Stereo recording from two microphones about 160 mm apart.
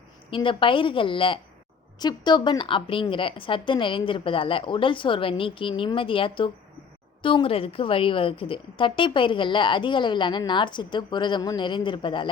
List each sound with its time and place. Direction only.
0.3 s a woman's voice: 30° left (ahead or behind)